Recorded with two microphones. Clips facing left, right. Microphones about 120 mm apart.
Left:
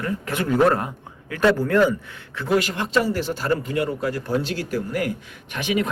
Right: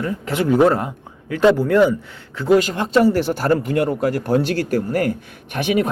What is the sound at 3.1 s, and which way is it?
A man's voice, 60° right (ahead or behind).